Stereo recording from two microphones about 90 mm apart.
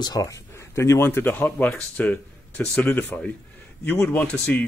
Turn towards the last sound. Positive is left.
turn(degrees=15)  # may be behind; listen again after turning